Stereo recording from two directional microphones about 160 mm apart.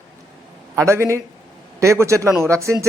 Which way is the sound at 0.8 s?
15° right (ahead or behind).